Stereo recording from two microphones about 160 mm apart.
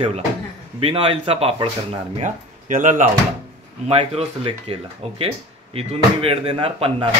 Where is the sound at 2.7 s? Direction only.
55° right (ahead or behind).